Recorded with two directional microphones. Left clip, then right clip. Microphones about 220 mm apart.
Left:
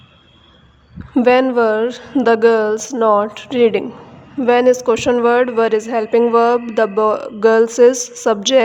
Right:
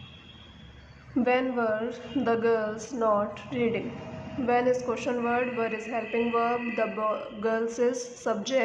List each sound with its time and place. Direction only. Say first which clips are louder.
1.1 s speech: left 14 dB; 50° left (ahead or behind)